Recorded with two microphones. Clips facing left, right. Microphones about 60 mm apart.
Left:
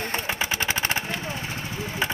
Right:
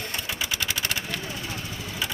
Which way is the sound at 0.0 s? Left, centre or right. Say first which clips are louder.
Left 4 dB; left.